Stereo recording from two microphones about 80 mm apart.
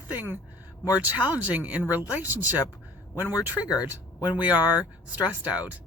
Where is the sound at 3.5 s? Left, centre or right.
Left.